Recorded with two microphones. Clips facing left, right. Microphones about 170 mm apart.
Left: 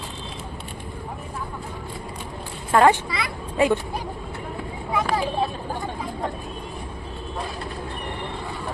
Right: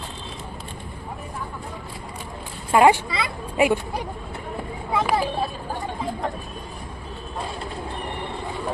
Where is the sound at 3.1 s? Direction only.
25° right (ahead or behind).